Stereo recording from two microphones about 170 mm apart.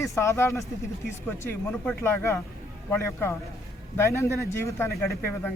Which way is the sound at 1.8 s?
10° left (ahead or behind).